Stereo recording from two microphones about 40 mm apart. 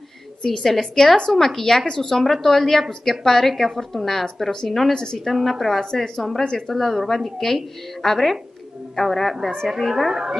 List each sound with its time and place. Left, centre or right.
0.5 s a woman's voice: centre
4.9 s a woman's voice: centre
5.2 s a woman's voice: centre
5.8 s a woman's voice: centre
9.7 s a woman's voice: centre